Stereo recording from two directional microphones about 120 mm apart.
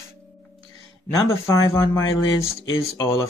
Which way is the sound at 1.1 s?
30° left (ahead or behind).